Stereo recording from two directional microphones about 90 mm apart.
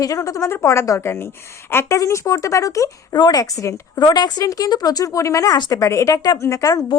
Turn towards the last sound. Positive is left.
turn(degrees=35)  # may be behind; listen again after turning